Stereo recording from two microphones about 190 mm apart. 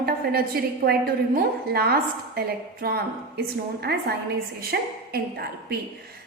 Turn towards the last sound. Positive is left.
turn(degrees=-55)  # may be behind; listen again after turning